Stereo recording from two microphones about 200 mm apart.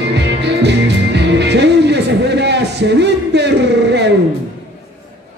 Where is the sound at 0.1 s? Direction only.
60° right (ahead or behind).